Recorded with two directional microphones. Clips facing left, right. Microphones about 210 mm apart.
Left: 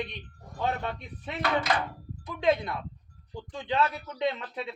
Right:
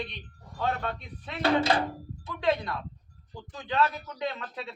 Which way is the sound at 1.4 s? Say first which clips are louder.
Right 4 dB; 30° right (ahead or behind).